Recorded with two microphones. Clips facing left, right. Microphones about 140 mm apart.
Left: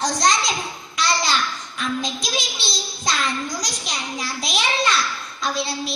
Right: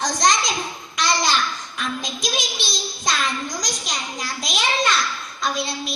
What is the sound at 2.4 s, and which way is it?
Speech, 50° right (ahead or behind).